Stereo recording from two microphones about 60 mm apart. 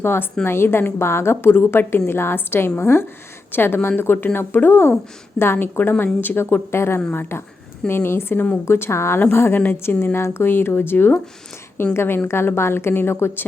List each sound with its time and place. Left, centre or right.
0.0 s a woman's voice: left